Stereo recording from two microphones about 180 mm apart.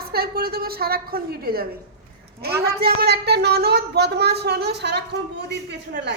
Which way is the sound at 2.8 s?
60° right (ahead or behind).